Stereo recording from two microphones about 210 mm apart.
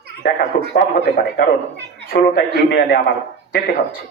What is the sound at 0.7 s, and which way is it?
A man's voice, 45° left (ahead or behind).